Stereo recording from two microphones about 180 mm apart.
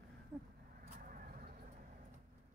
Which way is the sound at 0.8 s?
50° right (ahead or behind).